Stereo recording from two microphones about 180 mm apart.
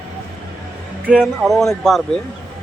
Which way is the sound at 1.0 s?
5° right (ahead or behind).